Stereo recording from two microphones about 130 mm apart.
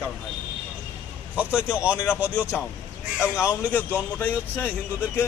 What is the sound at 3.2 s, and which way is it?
A man's voice, 20° left (ahead or behind).